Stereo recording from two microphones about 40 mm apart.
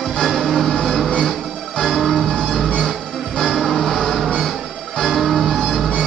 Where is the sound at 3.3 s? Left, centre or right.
Centre.